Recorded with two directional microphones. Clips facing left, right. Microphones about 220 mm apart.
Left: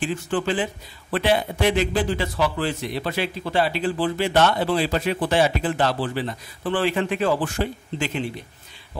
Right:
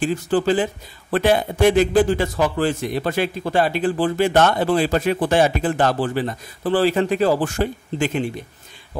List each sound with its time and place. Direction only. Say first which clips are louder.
0.0 s a man's voice: right 5 dB; 40° right (ahead or behind)